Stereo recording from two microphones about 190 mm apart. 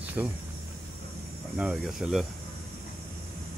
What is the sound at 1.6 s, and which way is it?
Speech, centre (ahead or behind).